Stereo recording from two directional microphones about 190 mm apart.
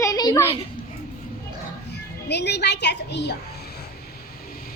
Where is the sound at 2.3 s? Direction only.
60° left (ahead or behind).